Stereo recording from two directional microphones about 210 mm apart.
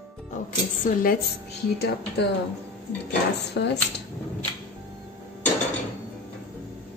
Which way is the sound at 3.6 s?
60° left (ahead or behind).